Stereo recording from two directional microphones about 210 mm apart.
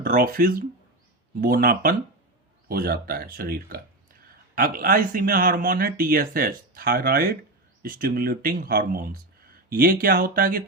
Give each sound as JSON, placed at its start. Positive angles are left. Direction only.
{"t": 0.0, "sound": "speech", "side_deg": -40}